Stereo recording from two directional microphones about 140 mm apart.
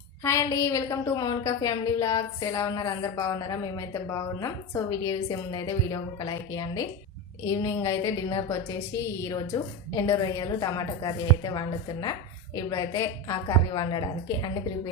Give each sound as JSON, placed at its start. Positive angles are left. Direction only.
{"t": 0.2, "sound": "a woman's voice", "side_deg": 20}